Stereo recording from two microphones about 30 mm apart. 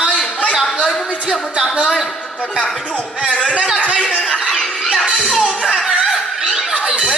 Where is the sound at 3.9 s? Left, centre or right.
Left.